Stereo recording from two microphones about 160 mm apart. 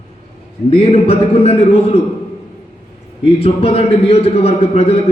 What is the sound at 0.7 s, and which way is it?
A man's voice, 40° left (ahead or behind).